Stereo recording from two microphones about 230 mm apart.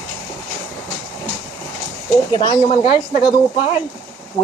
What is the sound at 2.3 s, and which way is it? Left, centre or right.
Speech, centre.